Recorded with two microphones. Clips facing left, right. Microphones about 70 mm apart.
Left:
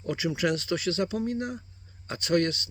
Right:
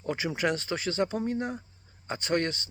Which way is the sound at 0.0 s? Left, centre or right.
Right.